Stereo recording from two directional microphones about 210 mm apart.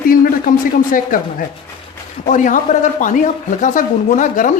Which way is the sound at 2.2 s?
40° left (ahead or behind).